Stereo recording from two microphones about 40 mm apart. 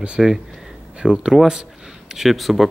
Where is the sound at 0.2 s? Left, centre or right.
Centre.